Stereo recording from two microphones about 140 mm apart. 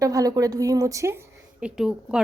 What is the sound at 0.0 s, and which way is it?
A woman's voice, 25° right (ahead or behind).